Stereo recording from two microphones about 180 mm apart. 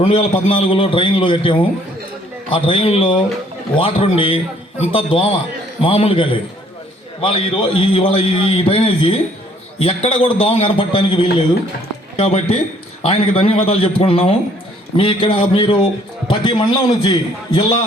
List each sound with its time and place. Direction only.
0.0 s a man's voice: 35° left (ahead or behind)